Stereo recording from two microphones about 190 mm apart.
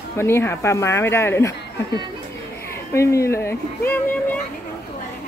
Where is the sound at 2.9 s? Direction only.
15° left (ahead or behind).